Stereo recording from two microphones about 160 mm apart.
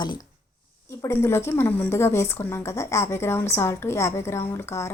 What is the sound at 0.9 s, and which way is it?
A woman's voice, 15° left (ahead or behind).